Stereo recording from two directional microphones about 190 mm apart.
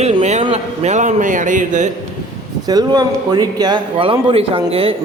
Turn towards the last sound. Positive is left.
turn(degrees=-30)  # may be behind; listen again after turning